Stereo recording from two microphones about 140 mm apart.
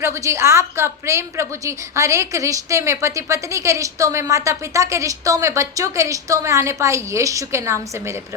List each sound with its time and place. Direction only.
0.0 s a woman's voice: 20° right (ahead or behind)